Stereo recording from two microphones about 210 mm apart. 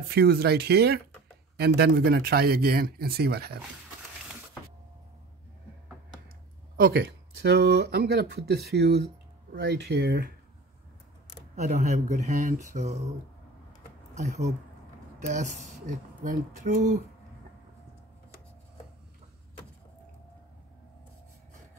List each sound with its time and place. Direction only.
0.1 s speech: 50° right (ahead or behind)
6.8 s speech: 50° right (ahead or behind)
11.5 s speech: 35° right (ahead or behind)
14.1 s speech: 35° right (ahead or behind)